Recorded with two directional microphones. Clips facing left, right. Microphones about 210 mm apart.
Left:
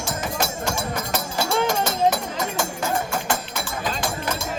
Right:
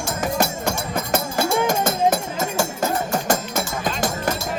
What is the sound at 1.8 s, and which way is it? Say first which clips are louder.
Music: right 2 dB; 45° right (ahead or behind).